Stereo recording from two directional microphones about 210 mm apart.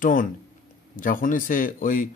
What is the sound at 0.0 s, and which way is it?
Speech, 40° left (ahead or behind).